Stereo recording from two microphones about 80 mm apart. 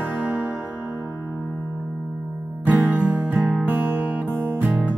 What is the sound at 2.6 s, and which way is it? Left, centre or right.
Music, right.